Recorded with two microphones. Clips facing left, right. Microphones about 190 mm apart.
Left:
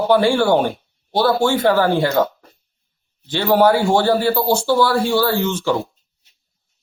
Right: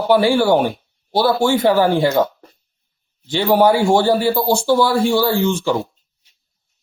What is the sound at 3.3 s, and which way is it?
Speech, 15° right (ahead or behind).